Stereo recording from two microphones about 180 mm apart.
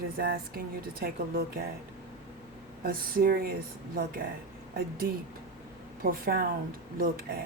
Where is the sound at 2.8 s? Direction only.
55° right (ahead or behind).